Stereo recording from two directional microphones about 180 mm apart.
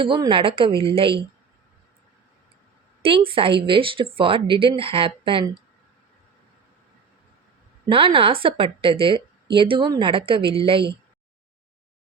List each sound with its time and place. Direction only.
0.0 s a woman's voice: 25° right (ahead or behind)
3.0 s speech: 30° right (ahead or behind)
7.9 s a woman's voice: 30° right (ahead or behind)